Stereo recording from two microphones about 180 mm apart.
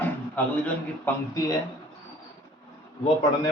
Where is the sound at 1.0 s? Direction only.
20° left (ahead or behind).